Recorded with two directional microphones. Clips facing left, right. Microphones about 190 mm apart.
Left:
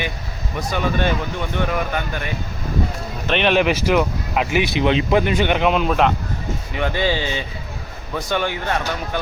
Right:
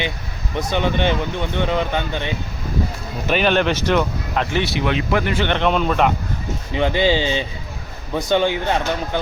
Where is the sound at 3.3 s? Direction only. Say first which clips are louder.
Even; centre (ahead or behind).